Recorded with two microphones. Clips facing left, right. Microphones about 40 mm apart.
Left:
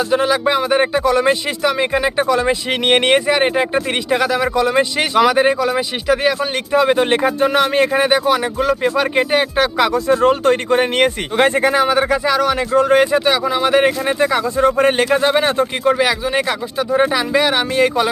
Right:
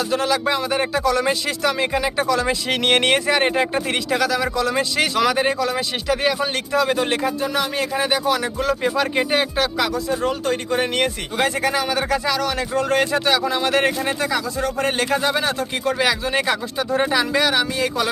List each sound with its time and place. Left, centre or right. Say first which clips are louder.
0.1 s speech: left 5 dB; centre
6.7 s speech: left 6 dB; left
9.7 s speech: left 6 dB; left
10.1 s speech: left 8 dB; left
11.7 s speech: left 6 dB; centre
14.2 s speech: left 7 dB; left
15.8 s speech: left 2 dB; centre
17.5 s speech: left 5 dB; left